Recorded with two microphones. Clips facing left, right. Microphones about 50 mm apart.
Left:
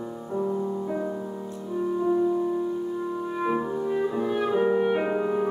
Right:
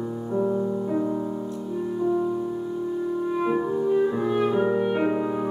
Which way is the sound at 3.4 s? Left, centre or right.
Centre.